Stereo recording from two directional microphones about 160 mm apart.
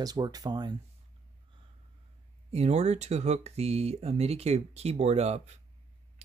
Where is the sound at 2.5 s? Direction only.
40° right (ahead or behind).